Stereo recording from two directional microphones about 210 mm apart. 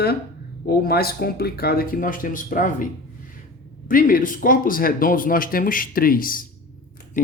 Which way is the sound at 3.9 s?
40° left (ahead or behind).